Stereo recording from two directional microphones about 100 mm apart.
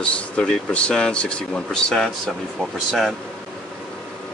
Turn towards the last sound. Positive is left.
turn(degrees=0)  # may be behind; listen again after turning